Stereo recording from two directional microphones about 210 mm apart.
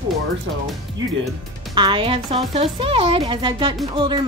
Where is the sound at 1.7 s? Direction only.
25° right (ahead or behind).